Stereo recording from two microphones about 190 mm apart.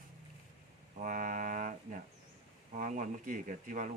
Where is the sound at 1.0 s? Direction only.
45° right (ahead or behind).